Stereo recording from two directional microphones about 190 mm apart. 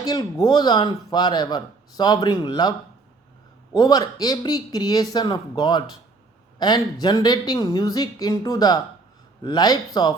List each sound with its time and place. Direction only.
0.0 s speech: 20° left (ahead or behind)